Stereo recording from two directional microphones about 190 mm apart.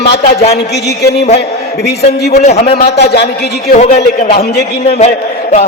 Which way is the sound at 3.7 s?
40° left (ahead or behind).